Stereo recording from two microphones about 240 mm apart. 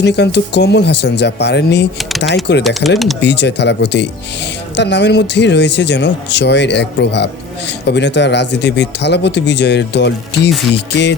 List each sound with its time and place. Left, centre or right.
0.0 s speech: left
2.0 s speech: centre
2.2 s speech: left